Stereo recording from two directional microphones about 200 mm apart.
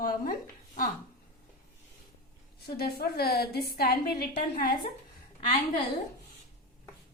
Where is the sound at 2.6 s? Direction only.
50° left (ahead or behind).